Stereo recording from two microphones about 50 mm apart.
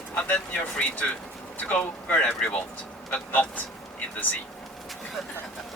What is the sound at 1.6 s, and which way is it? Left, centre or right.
Speech, left.